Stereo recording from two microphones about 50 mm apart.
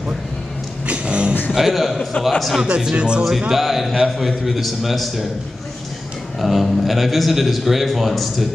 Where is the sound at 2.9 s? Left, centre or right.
Right.